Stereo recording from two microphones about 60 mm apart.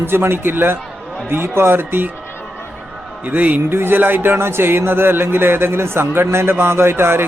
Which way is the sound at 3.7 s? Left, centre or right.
Right.